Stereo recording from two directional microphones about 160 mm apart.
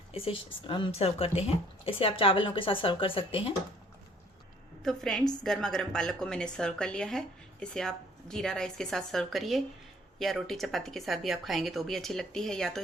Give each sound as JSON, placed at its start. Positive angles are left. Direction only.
{"t": 0.1, "sound": "speech", "side_deg": 35}
{"t": 4.8, "sound": "a woman's voice", "side_deg": 0}